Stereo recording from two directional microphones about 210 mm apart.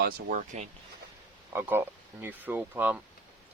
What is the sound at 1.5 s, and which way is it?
Speech, 10° right (ahead or behind).